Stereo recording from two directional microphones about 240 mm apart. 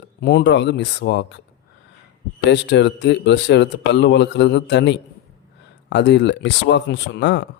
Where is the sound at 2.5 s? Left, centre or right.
Left.